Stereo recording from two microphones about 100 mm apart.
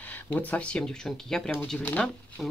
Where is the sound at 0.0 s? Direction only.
15° left (ahead or behind).